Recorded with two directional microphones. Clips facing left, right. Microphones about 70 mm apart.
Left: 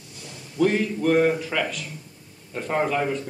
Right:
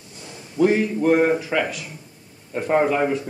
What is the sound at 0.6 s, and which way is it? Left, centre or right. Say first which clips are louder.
A man's voice: right 3 dB; centre.